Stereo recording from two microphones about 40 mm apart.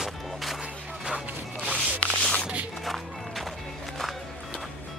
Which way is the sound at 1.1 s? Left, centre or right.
Right.